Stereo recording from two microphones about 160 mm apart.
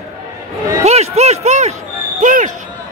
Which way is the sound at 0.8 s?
45° right (ahead or behind).